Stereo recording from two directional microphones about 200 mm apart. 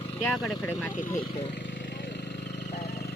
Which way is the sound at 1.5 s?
60° left (ahead or behind).